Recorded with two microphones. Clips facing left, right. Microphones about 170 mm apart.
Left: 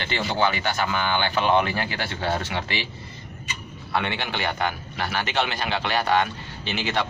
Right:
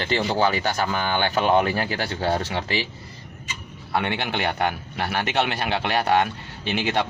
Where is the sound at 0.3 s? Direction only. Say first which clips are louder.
Left 1 dB; 40° right (ahead or behind).